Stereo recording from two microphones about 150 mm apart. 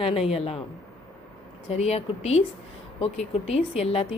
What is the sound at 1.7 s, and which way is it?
Speech, 45° left (ahead or behind).